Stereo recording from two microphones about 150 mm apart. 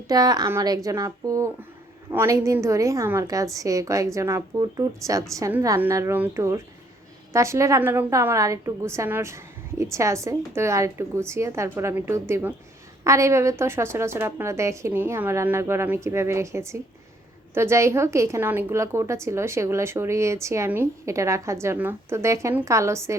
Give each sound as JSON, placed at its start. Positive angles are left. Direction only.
{"t": 0.1, "sound": "a woman's voice", "side_deg": -25}